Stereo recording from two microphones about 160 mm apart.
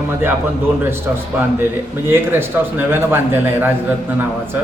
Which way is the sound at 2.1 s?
15° right (ahead or behind).